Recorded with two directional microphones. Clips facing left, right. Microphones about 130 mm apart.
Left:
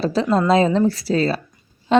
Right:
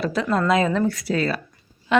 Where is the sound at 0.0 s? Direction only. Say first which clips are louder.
Left 4 dB; 30° left (ahead or behind).